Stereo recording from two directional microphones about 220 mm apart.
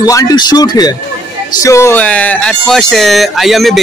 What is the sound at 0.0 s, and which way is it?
Speech, 15° left (ahead or behind).